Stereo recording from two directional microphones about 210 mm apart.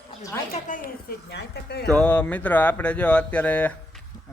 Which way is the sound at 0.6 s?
40° left (ahead or behind).